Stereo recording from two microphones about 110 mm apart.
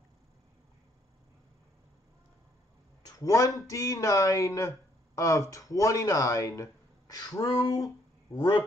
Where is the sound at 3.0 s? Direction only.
30° left (ahead or behind).